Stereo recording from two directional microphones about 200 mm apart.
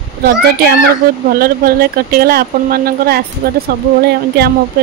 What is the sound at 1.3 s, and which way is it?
Speech, 50° right (ahead or behind).